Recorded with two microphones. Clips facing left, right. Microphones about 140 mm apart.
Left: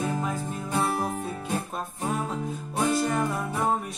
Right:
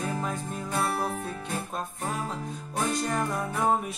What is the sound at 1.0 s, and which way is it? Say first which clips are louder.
Speech: left 2 dB; 5° left (ahead or behind).